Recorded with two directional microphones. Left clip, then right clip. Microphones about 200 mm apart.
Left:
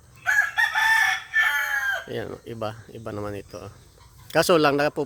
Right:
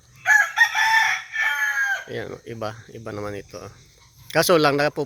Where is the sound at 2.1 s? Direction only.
10° left (ahead or behind).